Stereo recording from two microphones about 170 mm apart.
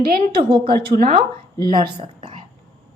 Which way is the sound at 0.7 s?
60° right (ahead or behind).